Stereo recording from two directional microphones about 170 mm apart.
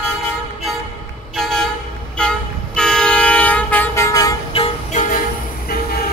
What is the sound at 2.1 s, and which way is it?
Train, 5° left (ahead or behind).